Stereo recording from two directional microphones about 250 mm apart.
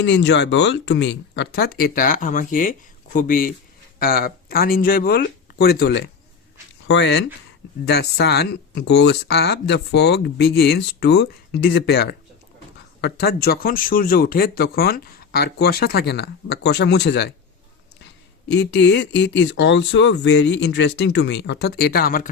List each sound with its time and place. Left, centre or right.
0.0 s speech: left
18.4 s speech: left